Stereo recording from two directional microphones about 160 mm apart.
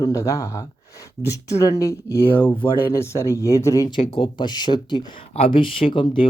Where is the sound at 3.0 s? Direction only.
15° left (ahead or behind).